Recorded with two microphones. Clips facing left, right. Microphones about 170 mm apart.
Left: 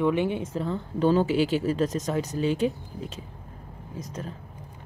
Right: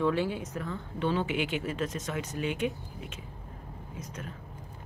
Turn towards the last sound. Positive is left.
turn(degrees=35)  # may be behind; listen again after turning